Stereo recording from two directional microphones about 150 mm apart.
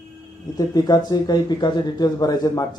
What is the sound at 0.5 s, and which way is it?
A man's voice, 25° left (ahead or behind).